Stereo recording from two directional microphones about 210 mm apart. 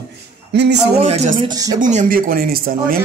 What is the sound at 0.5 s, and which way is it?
Speech, 55° right (ahead or behind).